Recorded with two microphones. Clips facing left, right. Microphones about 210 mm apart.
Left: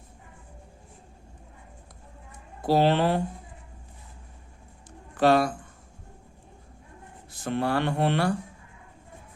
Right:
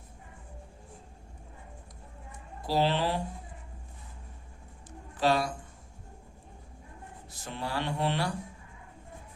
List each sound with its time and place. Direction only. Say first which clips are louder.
2.6 s speech: left 6 dB; 55° left (ahead or behind)
5.1 s a man's voice: left 6 dB; 55° left (ahead or behind)
7.3 s speech: left 10 dB; 55° left (ahead or behind)